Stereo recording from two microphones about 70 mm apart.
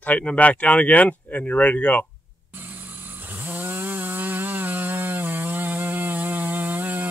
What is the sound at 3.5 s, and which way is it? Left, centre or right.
Chainsaw, right.